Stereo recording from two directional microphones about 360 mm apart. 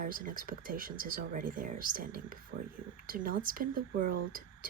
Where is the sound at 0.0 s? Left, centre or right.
Right.